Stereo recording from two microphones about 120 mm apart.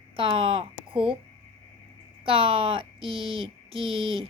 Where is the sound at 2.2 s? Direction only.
45° right (ahead or behind).